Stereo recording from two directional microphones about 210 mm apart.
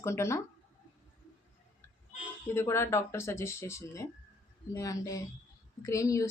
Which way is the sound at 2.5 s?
10° left (ahead or behind).